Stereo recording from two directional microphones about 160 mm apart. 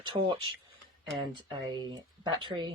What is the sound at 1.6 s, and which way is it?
Speech, 25° right (ahead or behind).